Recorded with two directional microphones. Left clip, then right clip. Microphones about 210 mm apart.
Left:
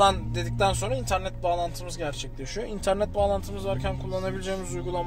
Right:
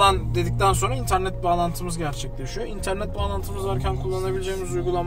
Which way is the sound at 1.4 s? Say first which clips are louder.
Right 4 dB; 50° left (ahead or behind).